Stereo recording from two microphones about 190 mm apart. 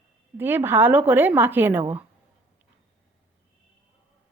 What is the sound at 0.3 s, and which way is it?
Speech, 10° right (ahead or behind).